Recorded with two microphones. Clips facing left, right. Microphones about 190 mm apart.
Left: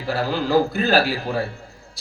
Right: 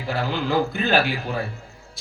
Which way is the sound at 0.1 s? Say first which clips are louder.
Left 4 dB; 35° left (ahead or behind).